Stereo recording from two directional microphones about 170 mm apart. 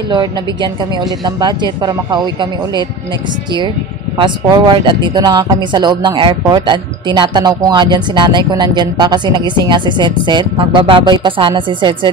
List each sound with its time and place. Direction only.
0.1 s speech: 25° right (ahead or behind)
4.2 s speech: 30° right (ahead or behind)